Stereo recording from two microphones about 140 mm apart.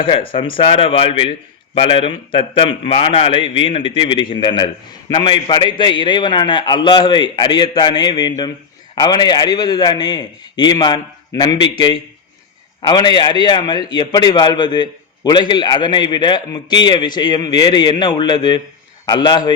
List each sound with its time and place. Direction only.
0.0 s a man's voice: 40° left (ahead or behind)